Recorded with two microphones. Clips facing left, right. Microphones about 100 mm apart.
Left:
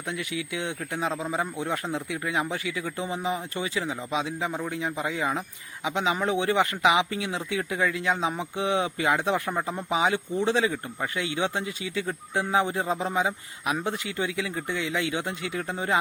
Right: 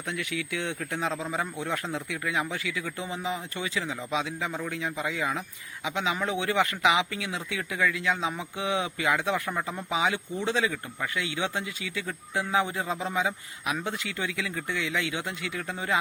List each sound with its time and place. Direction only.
0.1 s speech: 20° left (ahead or behind)